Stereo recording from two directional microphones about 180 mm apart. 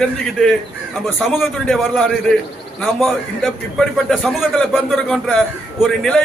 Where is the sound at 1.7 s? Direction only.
5° left (ahead or behind).